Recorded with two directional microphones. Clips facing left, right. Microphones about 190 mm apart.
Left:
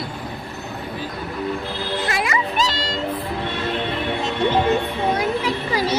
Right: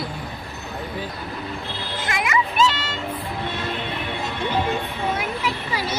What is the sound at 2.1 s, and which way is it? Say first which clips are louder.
Music: right 3 dB; 30° left (ahead or behind).